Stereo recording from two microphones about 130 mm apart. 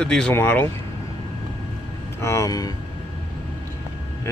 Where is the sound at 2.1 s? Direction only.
20° left (ahead or behind).